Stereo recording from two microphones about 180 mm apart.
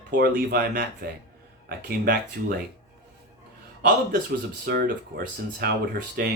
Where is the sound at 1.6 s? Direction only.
55° right (ahead or behind).